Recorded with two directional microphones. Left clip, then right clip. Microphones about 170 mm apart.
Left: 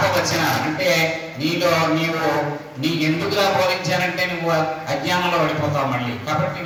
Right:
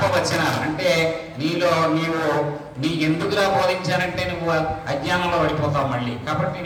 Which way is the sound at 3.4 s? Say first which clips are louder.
Left 1 dB; 20° left (ahead or behind).